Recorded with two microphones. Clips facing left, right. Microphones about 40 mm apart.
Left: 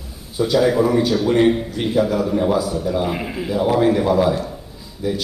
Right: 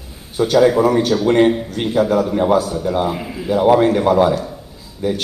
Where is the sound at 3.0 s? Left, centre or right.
Centre.